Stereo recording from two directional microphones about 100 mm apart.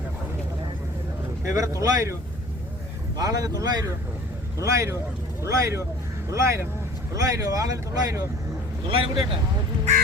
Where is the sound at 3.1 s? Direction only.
35° right (ahead or behind).